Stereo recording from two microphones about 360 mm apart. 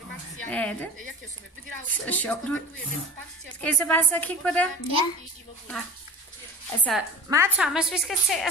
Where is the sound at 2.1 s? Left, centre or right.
Centre.